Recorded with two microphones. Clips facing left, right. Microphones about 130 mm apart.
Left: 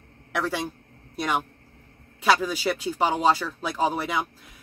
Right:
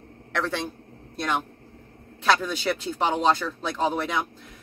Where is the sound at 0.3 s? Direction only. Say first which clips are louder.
Even; 10° left (ahead or behind).